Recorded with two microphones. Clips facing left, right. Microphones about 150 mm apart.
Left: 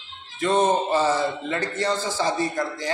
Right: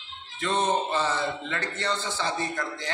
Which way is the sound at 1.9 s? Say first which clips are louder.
Left 3 dB; 40° left (ahead or behind).